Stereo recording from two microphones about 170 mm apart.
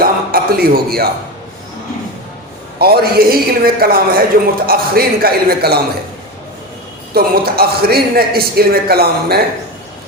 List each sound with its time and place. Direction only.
0.0 s music: 60° right (ahead or behind)
2.7 s a man's voice: 65° right (ahead or behind)
7.1 s a man's voice: 65° right (ahead or behind)